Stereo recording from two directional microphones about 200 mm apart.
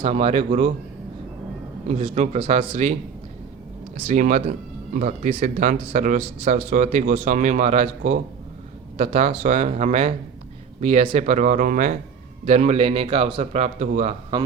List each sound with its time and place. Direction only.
0.0 s a man's voice: 30° right (ahead or behind)
1.9 s speech: 30° right (ahead or behind)
3.9 s speech: 35° right (ahead or behind)